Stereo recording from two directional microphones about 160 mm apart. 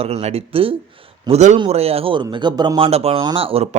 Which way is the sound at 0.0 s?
40° right (ahead or behind).